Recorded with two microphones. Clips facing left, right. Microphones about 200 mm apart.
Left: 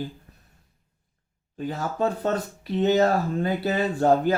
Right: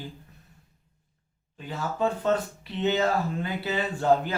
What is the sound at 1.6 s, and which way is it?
Speech, 40° left (ahead or behind).